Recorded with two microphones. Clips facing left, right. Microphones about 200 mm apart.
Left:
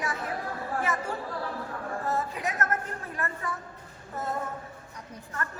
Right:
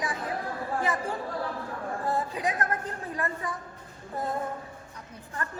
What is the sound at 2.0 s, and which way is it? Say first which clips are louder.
A woman's voice: right 2 dB; 15° right (ahead or behind).